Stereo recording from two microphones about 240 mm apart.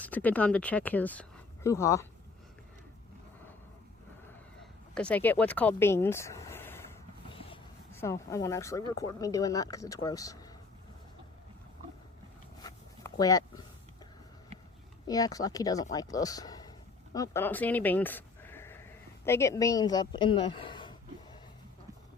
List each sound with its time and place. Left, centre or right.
0.0 s speech: centre
4.9 s speech: centre
7.3 s a sound: left
7.9 s speech: centre
12.6 s a sound: centre
15.0 s a woman's voice: centre